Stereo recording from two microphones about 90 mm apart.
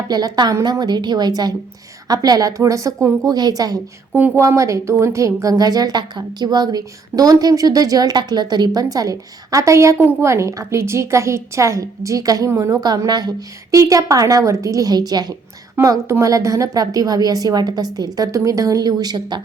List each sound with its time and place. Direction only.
0.1 s a woman's voice: 50° right (ahead or behind)
4.4 s a woman's voice: 35° right (ahead or behind)
15.8 s a woman's voice: 35° right (ahead or behind); by 19.4 s 50° right (ahead or behind)